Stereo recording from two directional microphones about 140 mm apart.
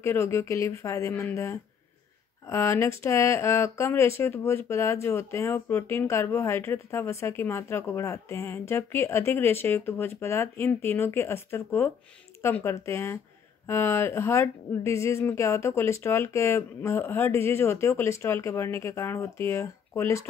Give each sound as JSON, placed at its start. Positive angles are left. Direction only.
{"t": 0.0, "sound": "speech", "side_deg": 20}